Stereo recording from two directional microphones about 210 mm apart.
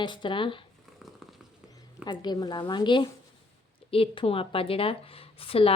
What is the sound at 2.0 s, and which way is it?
A woman's voice, 20° left (ahead or behind).